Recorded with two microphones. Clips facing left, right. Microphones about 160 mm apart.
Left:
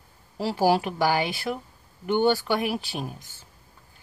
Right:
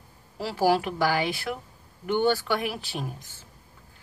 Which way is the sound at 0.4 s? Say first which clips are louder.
Left 1 dB; 15° left (ahead or behind).